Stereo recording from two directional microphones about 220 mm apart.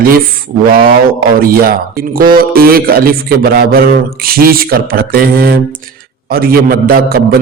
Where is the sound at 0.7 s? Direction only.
40° right (ahead or behind).